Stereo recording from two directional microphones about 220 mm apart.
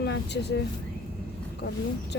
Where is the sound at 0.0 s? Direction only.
50° left (ahead or behind).